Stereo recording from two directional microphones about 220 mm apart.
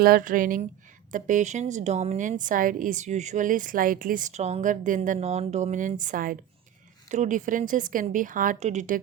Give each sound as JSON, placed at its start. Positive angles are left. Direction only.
{"t": 0.0, "sound": "a woman's voice", "side_deg": -40}